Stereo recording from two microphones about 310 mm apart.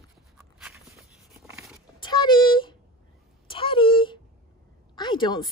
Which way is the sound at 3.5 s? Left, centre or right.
Centre.